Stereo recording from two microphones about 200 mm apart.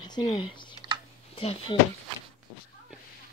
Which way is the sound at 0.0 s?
20° left (ahead or behind).